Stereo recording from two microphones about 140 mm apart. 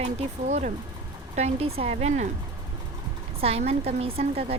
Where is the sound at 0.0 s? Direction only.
55° right (ahead or behind).